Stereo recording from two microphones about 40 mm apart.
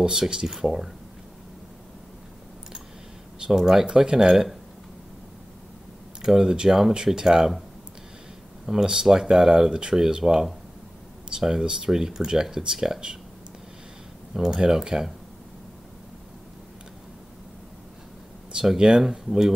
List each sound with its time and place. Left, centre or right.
0.0 s speech: centre
3.4 s speech: centre
3.8 s speech: right
4.3 s speech: centre
6.2 s speech: centre
8.6 s speech: centre
14.3 s speech: centre
18.8 s speech: centre